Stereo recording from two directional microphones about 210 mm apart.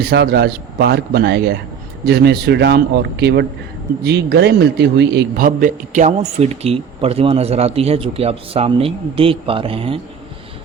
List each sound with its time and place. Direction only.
0.0 s a man's voice: 50° right (ahead or behind); by 10.0 s 25° right (ahead or behind)